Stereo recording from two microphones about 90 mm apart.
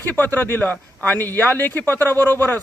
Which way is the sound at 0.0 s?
20° left (ahead or behind).